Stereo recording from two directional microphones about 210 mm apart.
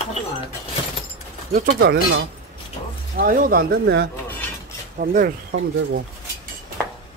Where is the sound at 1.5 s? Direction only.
45° right (ahead or behind).